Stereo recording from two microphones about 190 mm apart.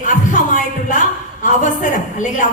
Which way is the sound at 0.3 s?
40° left (ahead or behind).